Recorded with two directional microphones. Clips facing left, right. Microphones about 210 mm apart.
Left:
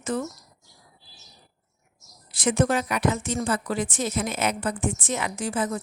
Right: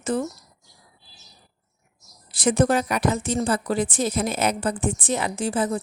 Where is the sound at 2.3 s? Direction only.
35° right (ahead or behind).